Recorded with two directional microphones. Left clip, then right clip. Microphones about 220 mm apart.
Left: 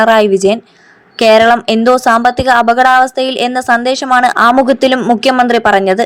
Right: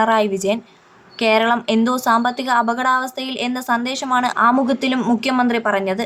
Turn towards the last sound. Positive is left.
turn(degrees=30)  # may be behind; listen again after turning